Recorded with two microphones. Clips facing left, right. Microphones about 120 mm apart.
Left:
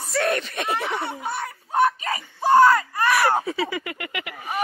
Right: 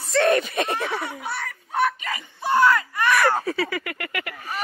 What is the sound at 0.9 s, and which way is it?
Snicker, 25° left (ahead or behind).